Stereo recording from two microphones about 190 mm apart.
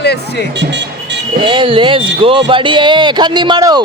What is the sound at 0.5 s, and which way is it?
Vehicle, 65° right (ahead or behind).